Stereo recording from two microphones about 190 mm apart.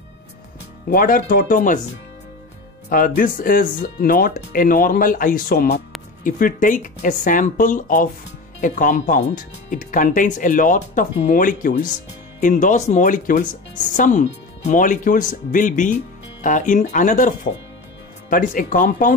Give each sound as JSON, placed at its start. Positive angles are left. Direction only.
{"t": 0.8, "sound": "speech", "side_deg": 50}
{"t": 2.9, "sound": "speech", "side_deg": 45}
{"t": 18.3, "sound": "speech", "side_deg": 45}